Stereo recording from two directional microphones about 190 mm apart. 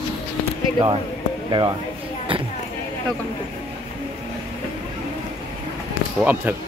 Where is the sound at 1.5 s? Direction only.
25° right (ahead or behind).